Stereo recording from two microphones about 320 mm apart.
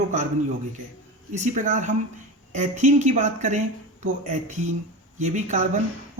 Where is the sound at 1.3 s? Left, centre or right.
Right.